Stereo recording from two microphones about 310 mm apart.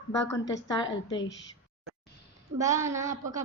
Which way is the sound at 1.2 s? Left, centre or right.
Left.